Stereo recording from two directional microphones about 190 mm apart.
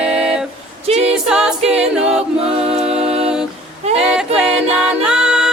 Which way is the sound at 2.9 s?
30° right (ahead or behind).